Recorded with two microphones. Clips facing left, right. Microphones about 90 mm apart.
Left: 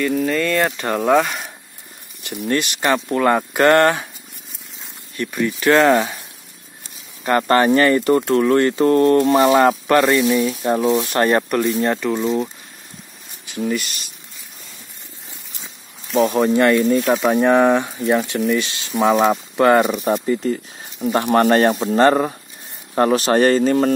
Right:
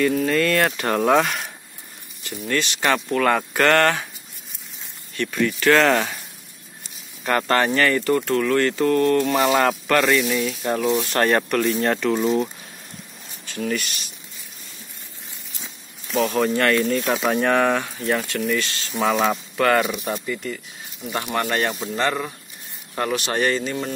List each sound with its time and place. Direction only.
0.0 s speech: centre (ahead or behind)
2.9 s speech: 20° left (ahead or behind)
5.1 s speech: 15° left (ahead or behind)
7.2 s speech: 20° left (ahead or behind)
10.2 s speech: 30° left (ahead or behind)
10.6 s speech: 20° left (ahead or behind)
11.7 s speech: 5° left (ahead or behind)
13.5 s speech: 15° left (ahead or behind)
13.7 s speech: centre (ahead or behind)
16.2 s speech: 15° left (ahead or behind)
19.9 s speech: 35° left (ahead or behind)